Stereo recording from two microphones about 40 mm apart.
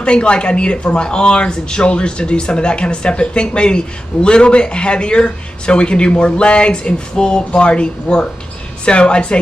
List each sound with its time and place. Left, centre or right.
0.0 s speech: left